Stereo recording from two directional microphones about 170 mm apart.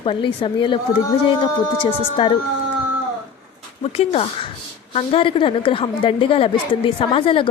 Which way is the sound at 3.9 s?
35° left (ahead or behind).